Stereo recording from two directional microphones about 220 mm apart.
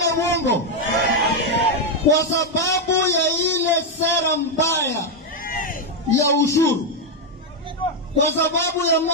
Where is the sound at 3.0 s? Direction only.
10° left (ahead or behind).